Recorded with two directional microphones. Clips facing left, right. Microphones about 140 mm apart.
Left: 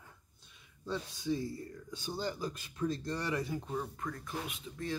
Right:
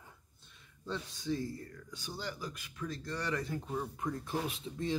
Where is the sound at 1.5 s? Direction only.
25° left (ahead or behind).